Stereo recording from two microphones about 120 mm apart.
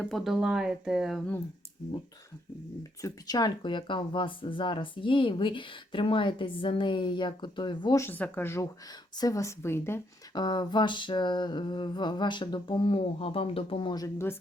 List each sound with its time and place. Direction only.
0.1 s speech: centre (ahead or behind)
3.0 s speech: 35° left (ahead or behind)
7.9 s speech: 15° left (ahead or behind)
10.3 s a sound: 35° left (ahead or behind)